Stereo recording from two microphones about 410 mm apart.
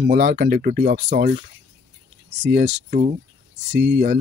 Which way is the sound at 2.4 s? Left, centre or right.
Right.